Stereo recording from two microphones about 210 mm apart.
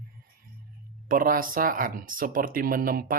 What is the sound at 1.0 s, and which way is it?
Speech, 40° right (ahead or behind).